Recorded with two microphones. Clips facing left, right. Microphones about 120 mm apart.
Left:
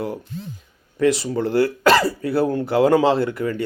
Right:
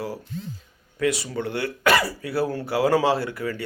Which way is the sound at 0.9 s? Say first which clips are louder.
Left 6 dB; 25° left (ahead or behind).